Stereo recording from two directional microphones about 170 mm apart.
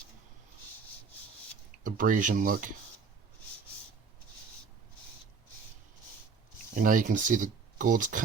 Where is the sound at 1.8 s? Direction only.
50° right (ahead or behind).